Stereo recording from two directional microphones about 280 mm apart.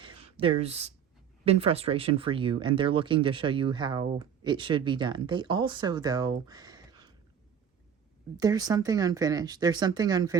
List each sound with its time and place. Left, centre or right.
0.0 s a sound: centre
1.5 s speech: right
8.4 s speech: centre